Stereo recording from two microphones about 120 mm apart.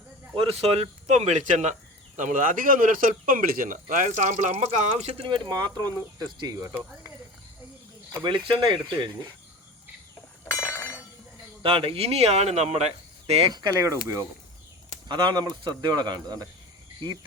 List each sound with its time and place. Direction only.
0.3 s speech: 55° right (ahead or behind); by 1.7 s 75° right (ahead or behind)
2.1 s speech: 90° right; by 6.7 s 30° right (ahead or behind)
8.1 s speech: 45° right (ahead or behind)
10.4 s chink: 20° left (ahead or behind)
11.6 s speech: 50° right (ahead or behind)
13.5 s speech: 30° right (ahead or behind)
15.0 s speech: 40° right (ahead or behind)